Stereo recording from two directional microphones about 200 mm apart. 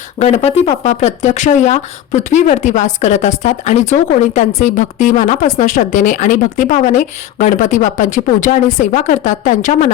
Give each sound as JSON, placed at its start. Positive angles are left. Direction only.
{"t": 0.2, "sound": "speech", "side_deg": 30}